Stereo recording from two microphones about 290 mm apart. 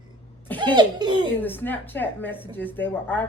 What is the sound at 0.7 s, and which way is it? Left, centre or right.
Speech, centre.